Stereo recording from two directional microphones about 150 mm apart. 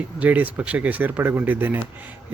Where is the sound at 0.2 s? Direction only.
10° right (ahead or behind).